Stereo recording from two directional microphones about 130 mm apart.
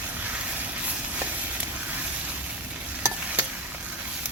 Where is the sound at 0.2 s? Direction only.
10° right (ahead or behind).